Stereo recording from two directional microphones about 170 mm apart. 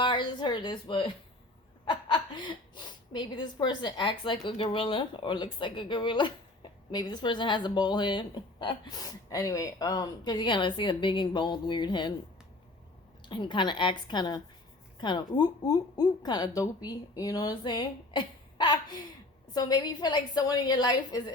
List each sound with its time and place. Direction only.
0.0 s a sound: 30° left (ahead or behind)
1.8 s a woman's voice: 30° left (ahead or behind)
13.2 s a woman's voice: 30° left (ahead or behind)